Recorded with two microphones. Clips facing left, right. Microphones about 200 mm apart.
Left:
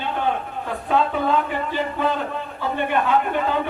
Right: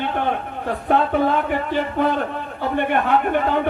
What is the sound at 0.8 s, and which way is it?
Speech, 60° right (ahead or behind).